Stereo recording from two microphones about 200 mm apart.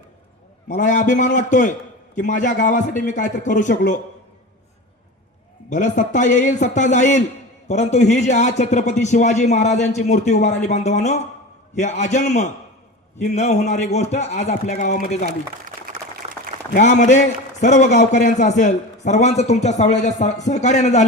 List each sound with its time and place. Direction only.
0.7 s a man's voice: 40° left (ahead or behind)
5.7 s a man's voice: 40° left (ahead or behind)
16.7 s a man's voice: 35° left (ahead or behind)